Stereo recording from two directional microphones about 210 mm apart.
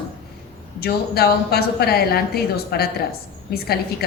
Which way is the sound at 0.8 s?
50° left (ahead or behind).